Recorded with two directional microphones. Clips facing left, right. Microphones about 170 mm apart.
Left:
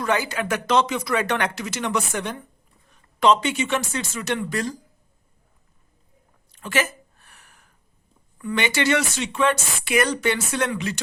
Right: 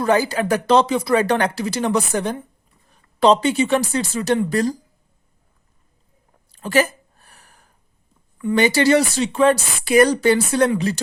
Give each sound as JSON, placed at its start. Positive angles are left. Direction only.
{"t": 0.0, "sound": "speech", "side_deg": -35}
{"t": 6.5, "sound": "a sound", "side_deg": -35}
{"t": 8.5, "sound": "speech", "side_deg": -35}